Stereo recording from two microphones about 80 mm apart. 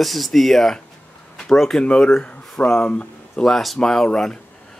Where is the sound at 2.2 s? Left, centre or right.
Centre.